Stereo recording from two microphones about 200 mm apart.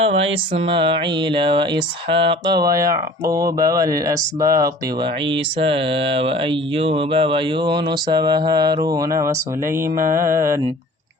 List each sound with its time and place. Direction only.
0.0 s mantra: 30° right (ahead or behind)
3.3 s speech: 15° right (ahead or behind)
5.3 s mantra: 25° right (ahead or behind)
10.2 s speech: 15° right (ahead or behind)